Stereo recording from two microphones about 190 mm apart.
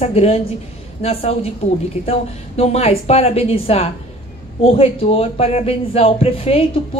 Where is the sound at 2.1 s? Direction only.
35° left (ahead or behind).